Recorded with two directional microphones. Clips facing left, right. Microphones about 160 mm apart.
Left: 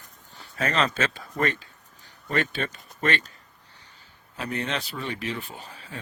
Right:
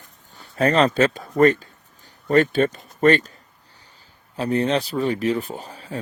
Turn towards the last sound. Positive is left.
turn(degrees=-40)  # may be behind; listen again after turning